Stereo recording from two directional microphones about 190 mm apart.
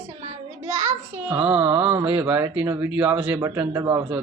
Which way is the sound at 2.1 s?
10° right (ahead or behind).